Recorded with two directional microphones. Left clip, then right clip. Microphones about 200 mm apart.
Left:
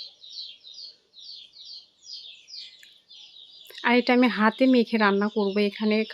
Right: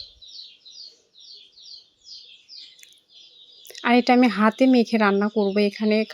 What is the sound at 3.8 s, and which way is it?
Speech, 15° right (ahead or behind).